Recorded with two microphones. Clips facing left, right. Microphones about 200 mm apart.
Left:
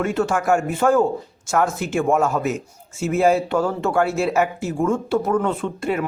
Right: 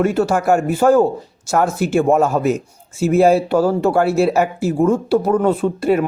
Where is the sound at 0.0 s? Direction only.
35° right (ahead or behind).